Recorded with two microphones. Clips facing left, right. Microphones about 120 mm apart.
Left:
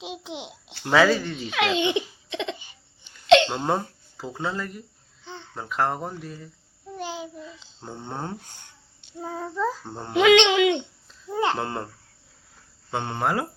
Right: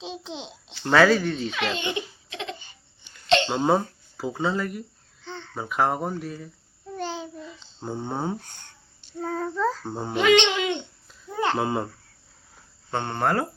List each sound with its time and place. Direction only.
0.0 s speech: 15° left (ahead or behind)
0.9 s speech: 5° left (ahead or behind)
1.6 s speech: 15° left (ahead or behind)
3.4 s speech: 5° right (ahead or behind)
5.2 s babbling: 10° left (ahead or behind)
5.5 s speech: 5° right (ahead or behind)
6.9 s child singing: 5° left (ahead or behind)
7.8 s speech: 10° right (ahead or behind)
9.2 s child singing: 10° left (ahead or behind)
9.8 s speech: 5° right (ahead or behind)
10.2 s speech: 70° left (ahead or behind)
11.3 s a sound: 20° left (ahead or behind)
11.5 s speech: 5° right (ahead or behind)
12.9 s speech: 5° left (ahead or behind)